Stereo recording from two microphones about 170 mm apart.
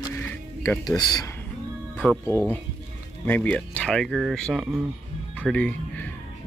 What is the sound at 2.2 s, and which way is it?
Speech, 15° left (ahead or behind).